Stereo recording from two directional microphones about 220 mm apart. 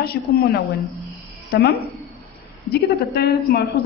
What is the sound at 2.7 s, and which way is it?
Speech, 45° left (ahead or behind).